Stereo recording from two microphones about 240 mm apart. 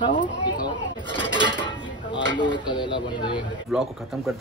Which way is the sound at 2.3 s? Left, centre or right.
Centre.